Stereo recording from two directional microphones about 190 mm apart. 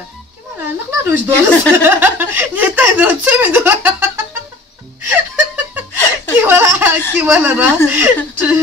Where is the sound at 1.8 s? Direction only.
10° right (ahead or behind).